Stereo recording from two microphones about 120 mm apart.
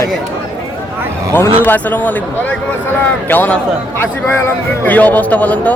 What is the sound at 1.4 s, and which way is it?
A man's voice, 15° left (ahead or behind).